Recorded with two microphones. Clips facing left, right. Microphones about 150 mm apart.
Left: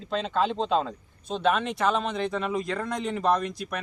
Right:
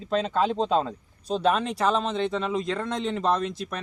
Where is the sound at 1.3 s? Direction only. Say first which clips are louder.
Right 1 dB; 35° right (ahead or behind).